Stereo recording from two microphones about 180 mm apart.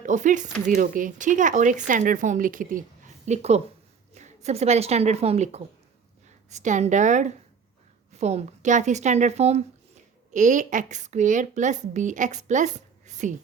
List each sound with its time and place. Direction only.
0.0 s a woman's voice: 45° right (ahead or behind)